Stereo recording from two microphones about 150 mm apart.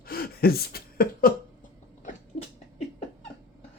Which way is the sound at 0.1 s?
90° left.